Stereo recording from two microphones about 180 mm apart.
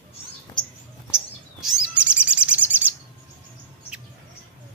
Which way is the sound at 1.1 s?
Centre (ahead or behind).